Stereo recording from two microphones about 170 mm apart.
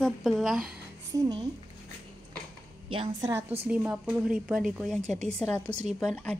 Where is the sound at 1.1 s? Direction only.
20° right (ahead or behind).